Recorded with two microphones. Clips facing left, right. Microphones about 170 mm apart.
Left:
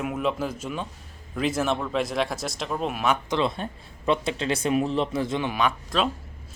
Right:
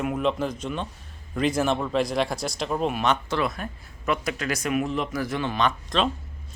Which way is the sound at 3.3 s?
25° left (ahead or behind).